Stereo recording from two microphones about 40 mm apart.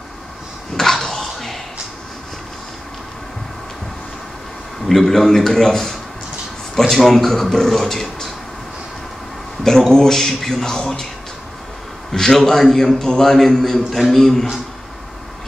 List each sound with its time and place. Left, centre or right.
0.7 s a sound: centre
4.8 s a man's voice: centre
9.6 s a man's voice: centre
12.1 s a man's voice: centre